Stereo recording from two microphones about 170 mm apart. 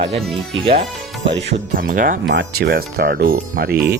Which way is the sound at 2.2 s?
80° right.